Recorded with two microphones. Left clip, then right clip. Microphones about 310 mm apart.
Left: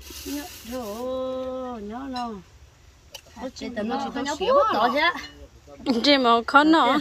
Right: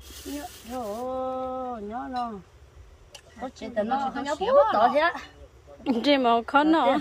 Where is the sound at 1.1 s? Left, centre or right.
Centre.